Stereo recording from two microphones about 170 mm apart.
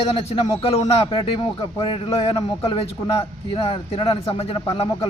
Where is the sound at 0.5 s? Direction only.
35° left (ahead or behind).